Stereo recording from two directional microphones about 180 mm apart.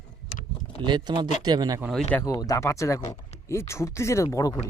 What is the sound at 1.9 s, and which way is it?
Speech, 5° left (ahead or behind).